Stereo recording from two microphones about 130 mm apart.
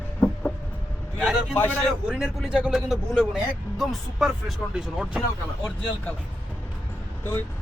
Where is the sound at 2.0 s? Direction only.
5° right (ahead or behind).